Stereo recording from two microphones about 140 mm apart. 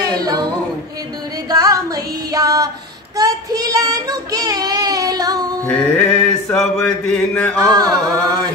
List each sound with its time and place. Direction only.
0.0 s a sound: 25° right (ahead or behind)
1.5 s music: 25° right (ahead or behind)
3.2 s child singing: 25° right (ahead or behind)
5.7 s music: 5° left (ahead or behind)
7.3 s a sound: 10° left (ahead or behind)
7.7 s chant: 30° right (ahead or behind)